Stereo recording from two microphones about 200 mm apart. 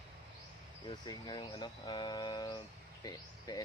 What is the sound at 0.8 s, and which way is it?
Speech, 20° left (ahead or behind).